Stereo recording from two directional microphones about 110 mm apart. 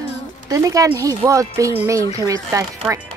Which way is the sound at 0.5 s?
30° right (ahead or behind).